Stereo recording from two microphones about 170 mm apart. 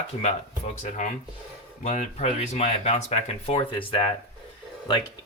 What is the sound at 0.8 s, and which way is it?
Speech, 45° left (ahead or behind).